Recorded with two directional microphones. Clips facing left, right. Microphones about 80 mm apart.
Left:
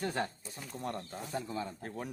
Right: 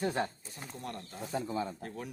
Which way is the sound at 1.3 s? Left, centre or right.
Centre.